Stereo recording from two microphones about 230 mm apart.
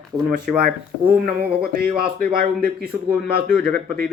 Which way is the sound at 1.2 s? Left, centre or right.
Right.